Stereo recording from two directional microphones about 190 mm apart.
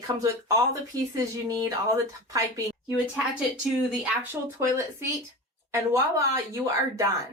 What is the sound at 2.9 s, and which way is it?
Speech, 5° right (ahead or behind).